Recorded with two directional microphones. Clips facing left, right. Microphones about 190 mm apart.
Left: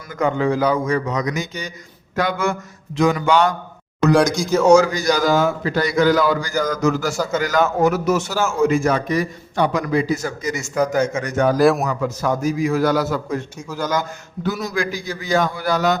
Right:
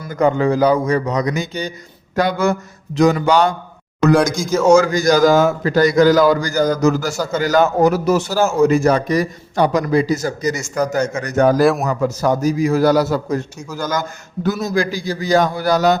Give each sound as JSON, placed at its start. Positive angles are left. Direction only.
{"t": 0.0, "sound": "a man's voice", "side_deg": -35}
{"t": 4.2, "sound": "a man's voice", "side_deg": 0}
{"t": 4.7, "sound": "a man's voice", "side_deg": -50}
{"t": 11.6, "sound": "a man's voice", "side_deg": 0}
{"t": 11.9, "sound": "a man's voice", "side_deg": -45}
{"t": 13.7, "sound": "a man's voice", "side_deg": -10}
{"t": 14.7, "sound": "a man's voice", "side_deg": -35}